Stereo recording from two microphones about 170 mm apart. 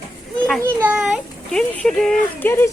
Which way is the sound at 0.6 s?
10° right (ahead or behind).